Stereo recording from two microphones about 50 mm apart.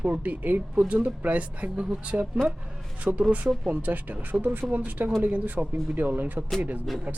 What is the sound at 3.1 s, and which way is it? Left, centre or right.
A woman's voice, right.